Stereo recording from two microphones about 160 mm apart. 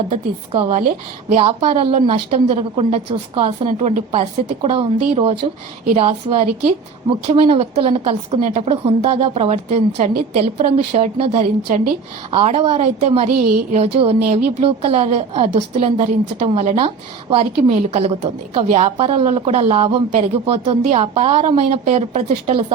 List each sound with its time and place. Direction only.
0.5 s a woman's voice: 35° right (ahead or behind)